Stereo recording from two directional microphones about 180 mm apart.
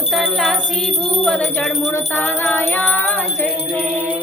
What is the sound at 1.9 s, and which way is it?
Music, 10° left (ahead or behind).